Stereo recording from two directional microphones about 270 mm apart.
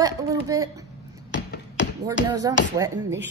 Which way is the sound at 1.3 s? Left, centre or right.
Left.